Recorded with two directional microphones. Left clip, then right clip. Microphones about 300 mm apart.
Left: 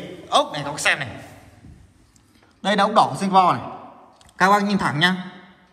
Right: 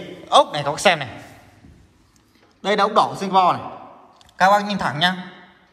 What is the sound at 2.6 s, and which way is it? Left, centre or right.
A man's voice, centre.